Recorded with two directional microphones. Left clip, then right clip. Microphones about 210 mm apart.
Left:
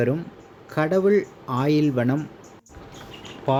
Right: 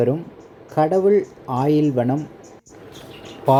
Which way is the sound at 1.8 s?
15° left (ahead or behind).